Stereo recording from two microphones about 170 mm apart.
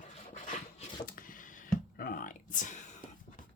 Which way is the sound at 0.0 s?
45° left (ahead or behind).